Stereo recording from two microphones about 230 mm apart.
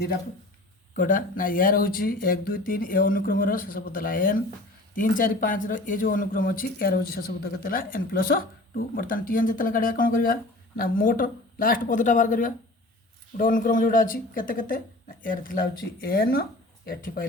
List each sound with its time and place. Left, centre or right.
0.9 s speech: left